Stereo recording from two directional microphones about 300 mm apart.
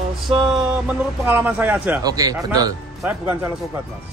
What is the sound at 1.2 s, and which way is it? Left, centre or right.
Speech, centre.